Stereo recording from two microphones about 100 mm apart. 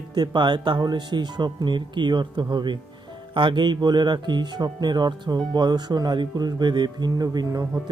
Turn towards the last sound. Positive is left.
turn(degrees=-40)  # may be behind; listen again after turning